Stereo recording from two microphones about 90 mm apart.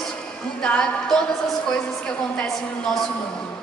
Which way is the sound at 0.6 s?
10° left (ahead or behind).